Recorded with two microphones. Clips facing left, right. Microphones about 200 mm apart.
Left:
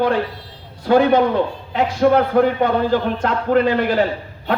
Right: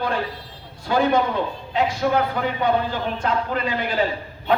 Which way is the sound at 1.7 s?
60° left (ahead or behind).